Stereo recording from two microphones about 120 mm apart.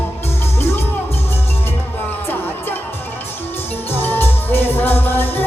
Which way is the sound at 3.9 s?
15° left (ahead or behind).